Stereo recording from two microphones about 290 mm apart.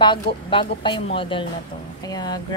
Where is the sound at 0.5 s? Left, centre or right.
Centre.